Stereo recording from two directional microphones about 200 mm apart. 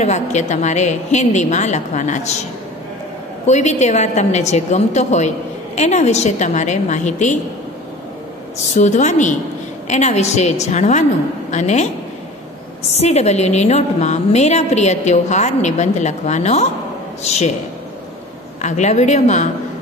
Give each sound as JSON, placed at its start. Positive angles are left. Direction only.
{"t": 0.0, "sound": "a woman's voice", "side_deg": 35}
{"t": 3.4, "sound": "a woman's voice", "side_deg": 35}
{"t": 8.7, "sound": "a woman's voice", "side_deg": 35}
{"t": 12.9, "sound": "a woman's voice", "side_deg": 35}
{"t": 18.6, "sound": "a woman's voice", "side_deg": 35}